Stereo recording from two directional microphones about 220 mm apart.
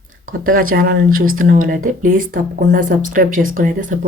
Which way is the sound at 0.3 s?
40° right (ahead or behind).